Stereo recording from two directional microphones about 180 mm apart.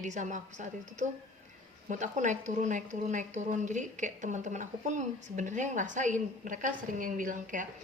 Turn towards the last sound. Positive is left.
turn(degrees=-45)  # may be behind; listen again after turning